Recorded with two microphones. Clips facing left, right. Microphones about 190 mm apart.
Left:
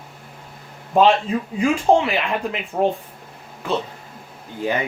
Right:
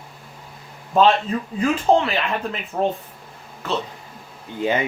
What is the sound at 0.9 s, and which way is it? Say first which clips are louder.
Speech: left 1 dB; 15° left (ahead or behind).